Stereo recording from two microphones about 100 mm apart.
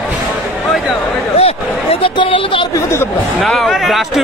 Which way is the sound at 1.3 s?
80° left.